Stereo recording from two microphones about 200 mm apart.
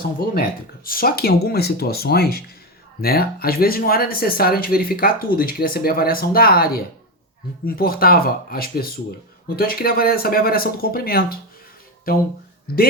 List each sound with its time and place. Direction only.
0.2 s speech: 50° left (ahead or behind)